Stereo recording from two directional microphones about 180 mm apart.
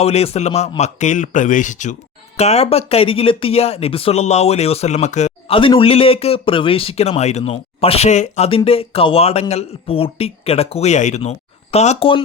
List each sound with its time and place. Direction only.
0.0 s speech: 35° left (ahead or behind)